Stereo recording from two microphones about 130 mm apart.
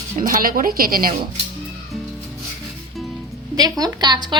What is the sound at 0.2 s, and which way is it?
Speech, 90° right.